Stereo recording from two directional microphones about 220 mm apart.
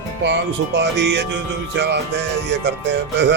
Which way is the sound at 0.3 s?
50° right (ahead or behind).